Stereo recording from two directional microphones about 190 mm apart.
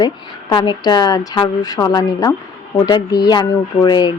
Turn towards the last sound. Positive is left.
turn(degrees=20)  # may be behind; listen again after turning